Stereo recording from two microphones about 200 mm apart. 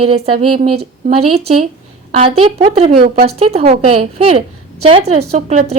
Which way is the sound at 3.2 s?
30° right (ahead or behind).